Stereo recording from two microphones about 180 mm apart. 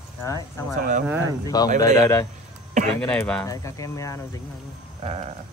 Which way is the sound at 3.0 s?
5° left (ahead or behind).